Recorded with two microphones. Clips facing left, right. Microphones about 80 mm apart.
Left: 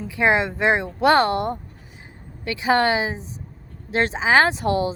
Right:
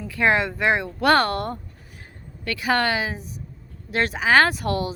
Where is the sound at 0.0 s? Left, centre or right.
Left.